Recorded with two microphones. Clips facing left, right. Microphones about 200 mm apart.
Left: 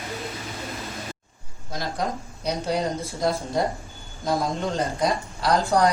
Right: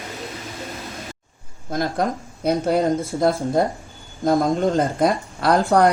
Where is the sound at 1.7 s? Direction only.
50° right (ahead or behind).